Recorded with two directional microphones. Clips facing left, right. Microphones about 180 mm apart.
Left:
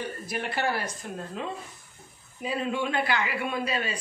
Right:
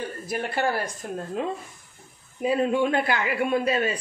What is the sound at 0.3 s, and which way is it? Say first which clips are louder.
A man's voice: right 4 dB; 45° right (ahead or behind).